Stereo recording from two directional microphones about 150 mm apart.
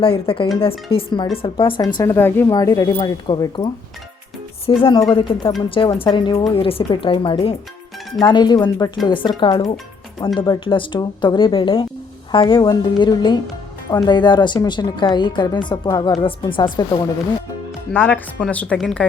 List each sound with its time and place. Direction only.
0.0 s a woman's voice: 35° left (ahead or behind)
17.9 s speech: 10° left (ahead or behind)